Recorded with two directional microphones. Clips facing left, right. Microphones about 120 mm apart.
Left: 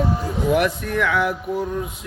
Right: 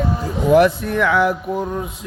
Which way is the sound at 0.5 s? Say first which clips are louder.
Right 9 dB; 30° right (ahead or behind).